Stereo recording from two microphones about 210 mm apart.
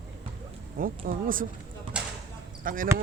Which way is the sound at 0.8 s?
40° right (ahead or behind).